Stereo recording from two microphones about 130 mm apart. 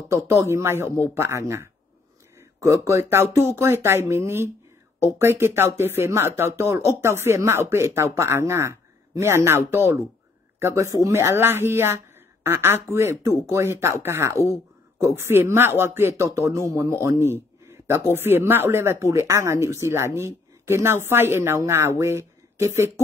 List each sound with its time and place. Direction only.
0.1 s a woman's voice: 20° right (ahead or behind)